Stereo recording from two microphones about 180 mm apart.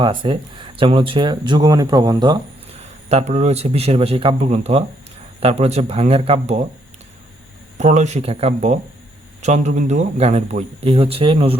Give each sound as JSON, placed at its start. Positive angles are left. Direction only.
{"t": 0.0, "sound": "speech", "side_deg": -25}
{"t": 2.7, "sound": "a man's voice", "side_deg": -35}
{"t": 7.8, "sound": "a man's voice", "side_deg": -40}